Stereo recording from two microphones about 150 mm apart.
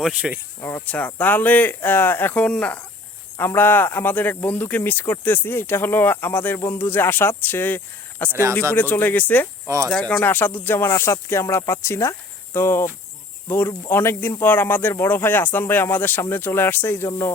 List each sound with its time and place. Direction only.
0.0 s speech: 5° right (ahead or behind)
0.9 s speech: 10° left (ahead or behind)
8.3 s speech: 15° right (ahead or behind)
8.7 s speech: 10° left (ahead or behind)
9.6 s speech: 20° right (ahead or behind)
9.9 s speech: 10° left (ahead or behind)